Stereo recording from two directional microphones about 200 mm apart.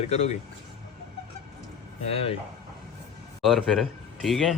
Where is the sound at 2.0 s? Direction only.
30° left (ahead or behind).